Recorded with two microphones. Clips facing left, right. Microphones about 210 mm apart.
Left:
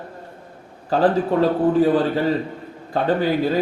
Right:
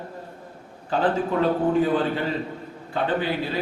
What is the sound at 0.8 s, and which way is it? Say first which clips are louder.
Speech: left 5 dB; 40° left (ahead or behind).